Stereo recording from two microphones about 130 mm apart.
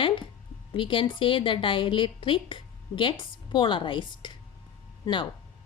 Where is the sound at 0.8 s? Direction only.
40° left (ahead or behind).